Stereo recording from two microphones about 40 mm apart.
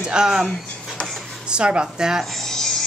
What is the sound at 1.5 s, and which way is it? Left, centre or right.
Speech, right.